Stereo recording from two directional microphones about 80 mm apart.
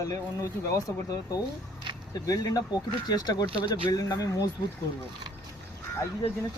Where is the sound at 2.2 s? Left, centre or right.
Left.